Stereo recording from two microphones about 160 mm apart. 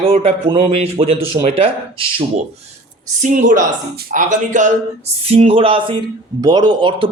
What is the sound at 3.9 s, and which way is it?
Speech, 70° right (ahead or behind).